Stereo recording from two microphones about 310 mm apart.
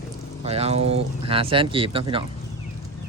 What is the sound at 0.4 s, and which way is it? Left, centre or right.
Speech, centre.